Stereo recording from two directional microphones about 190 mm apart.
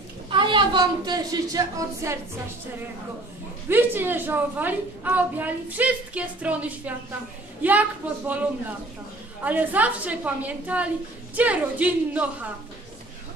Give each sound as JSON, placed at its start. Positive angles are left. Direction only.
{"t": 0.3, "sound": "a woman's voice", "side_deg": -25}
{"t": 3.6, "sound": "a woman's voice", "side_deg": -10}
{"t": 8.3, "sound": "a woman's voice", "side_deg": -10}